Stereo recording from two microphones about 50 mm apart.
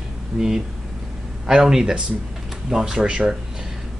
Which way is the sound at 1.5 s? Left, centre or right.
Centre.